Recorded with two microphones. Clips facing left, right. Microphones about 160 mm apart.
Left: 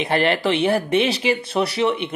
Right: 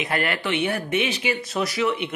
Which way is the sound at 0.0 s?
30° left (ahead or behind).